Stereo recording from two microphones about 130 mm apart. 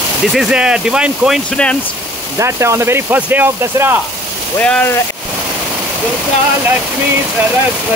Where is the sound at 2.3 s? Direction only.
20° right (ahead or behind).